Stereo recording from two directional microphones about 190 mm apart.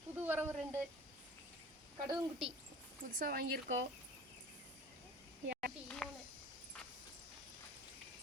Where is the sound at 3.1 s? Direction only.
50° right (ahead or behind).